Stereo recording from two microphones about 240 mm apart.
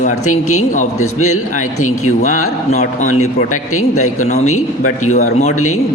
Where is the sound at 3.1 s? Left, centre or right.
Left.